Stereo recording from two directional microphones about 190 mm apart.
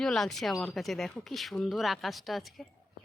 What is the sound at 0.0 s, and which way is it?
Speech, 5° left (ahead or behind).